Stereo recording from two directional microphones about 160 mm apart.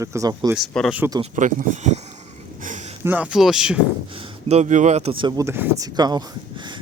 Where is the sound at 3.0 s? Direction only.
10° right (ahead or behind).